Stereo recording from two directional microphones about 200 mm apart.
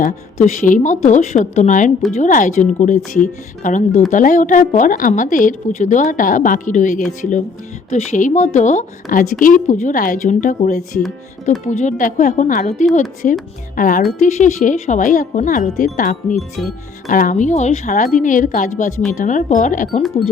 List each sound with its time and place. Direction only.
0.0 s a woman's voice: 40° left (ahead or behind)